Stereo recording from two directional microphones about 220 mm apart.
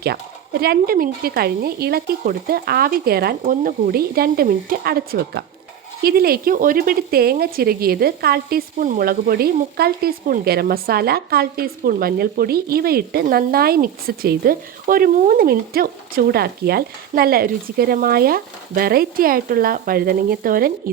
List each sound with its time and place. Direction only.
0.6 s speech: 45° right (ahead or behind)